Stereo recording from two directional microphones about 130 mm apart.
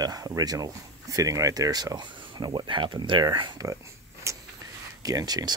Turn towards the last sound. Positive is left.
turn(degrees=-30)  # may be behind; listen again after turning